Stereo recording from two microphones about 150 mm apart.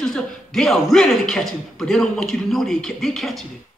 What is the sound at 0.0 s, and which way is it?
Speech, centre (ahead or behind).